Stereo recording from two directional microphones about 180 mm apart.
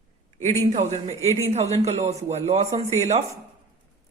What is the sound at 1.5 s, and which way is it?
Speech, 35° right (ahead or behind).